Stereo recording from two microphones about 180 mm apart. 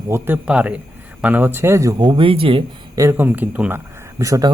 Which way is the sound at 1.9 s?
25° right (ahead or behind).